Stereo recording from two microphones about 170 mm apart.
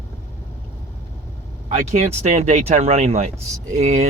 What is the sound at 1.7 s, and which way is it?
Speech, 40° right (ahead or behind).